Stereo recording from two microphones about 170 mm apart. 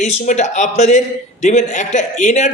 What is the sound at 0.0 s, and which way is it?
A man's voice, 45° left (ahead or behind).